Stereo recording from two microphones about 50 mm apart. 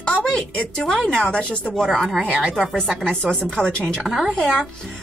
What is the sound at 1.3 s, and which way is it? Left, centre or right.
Speech, left.